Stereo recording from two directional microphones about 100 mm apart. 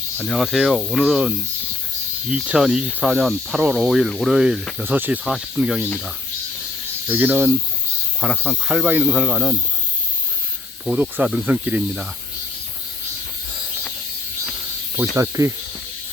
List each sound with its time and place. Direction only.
0.3 s speech: 5° right (ahead or behind)
4.8 s speech: 15° right (ahead or behind)
5.2 s speech: 5° right (ahead or behind)
7.1 s speech: 20° right (ahead or behind)
8.2 s speech: 10° right (ahead or behind)
8.9 s speech: 15° right (ahead or behind)
10.8 s speech: 15° right (ahead or behind)
15.1 s speech: 30° right (ahead or behind)